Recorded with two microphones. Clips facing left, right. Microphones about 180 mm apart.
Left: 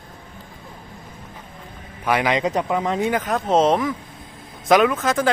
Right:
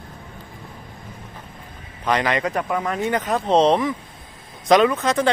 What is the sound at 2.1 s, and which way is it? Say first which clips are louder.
Speech: left 1 dB; 10° left (ahead or behind).